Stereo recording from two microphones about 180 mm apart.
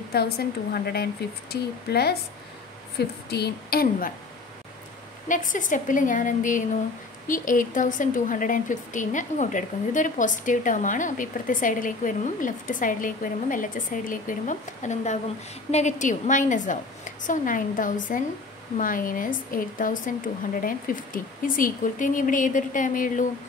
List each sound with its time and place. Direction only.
0.1 s speech: 60° left (ahead or behind)
3.3 s speech: 65° left (ahead or behind)
5.3 s a woman's voice: 45° left (ahead or behind)